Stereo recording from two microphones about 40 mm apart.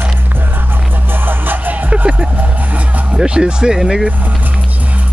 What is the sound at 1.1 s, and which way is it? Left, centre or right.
Music, right.